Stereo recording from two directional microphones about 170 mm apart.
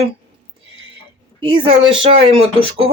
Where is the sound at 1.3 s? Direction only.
30° right (ahead or behind).